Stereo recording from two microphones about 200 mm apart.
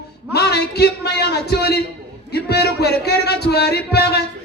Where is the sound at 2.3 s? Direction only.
55° left (ahead or behind).